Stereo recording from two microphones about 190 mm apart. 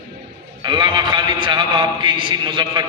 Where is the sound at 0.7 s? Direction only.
25° right (ahead or behind).